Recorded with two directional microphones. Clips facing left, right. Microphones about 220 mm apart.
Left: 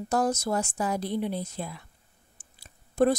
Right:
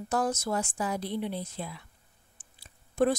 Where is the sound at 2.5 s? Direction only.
40° left (ahead or behind).